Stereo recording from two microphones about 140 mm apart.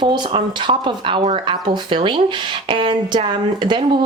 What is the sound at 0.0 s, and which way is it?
Speech, 35° right (ahead or behind).